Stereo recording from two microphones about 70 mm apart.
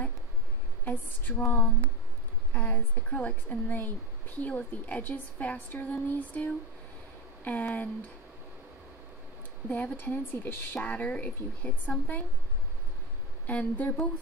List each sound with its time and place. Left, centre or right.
0.8 s speech: left
9.7 s speech: left
13.5 s speech: left